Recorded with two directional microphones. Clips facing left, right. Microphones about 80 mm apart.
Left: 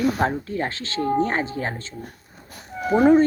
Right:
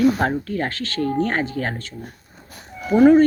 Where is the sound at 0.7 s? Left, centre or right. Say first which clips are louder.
Even; left.